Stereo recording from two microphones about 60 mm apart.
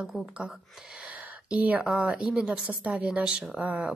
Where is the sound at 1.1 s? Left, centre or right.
Right.